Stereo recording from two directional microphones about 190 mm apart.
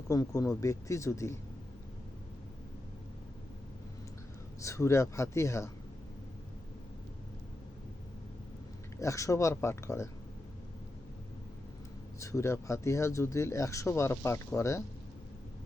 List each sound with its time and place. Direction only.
0.1 s speech: 15° left (ahead or behind)
4.6 s speech: 15° left (ahead or behind)
9.0 s speech: 15° left (ahead or behind)
12.2 s speech: 15° left (ahead or behind)